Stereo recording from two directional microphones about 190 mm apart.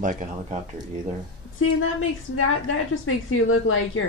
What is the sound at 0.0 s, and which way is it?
Speech, 40° right (ahead or behind).